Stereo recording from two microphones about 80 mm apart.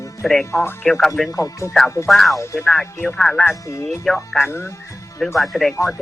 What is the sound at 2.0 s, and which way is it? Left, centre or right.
Speech, centre.